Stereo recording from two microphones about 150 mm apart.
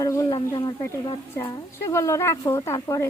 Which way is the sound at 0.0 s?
25° left (ahead or behind).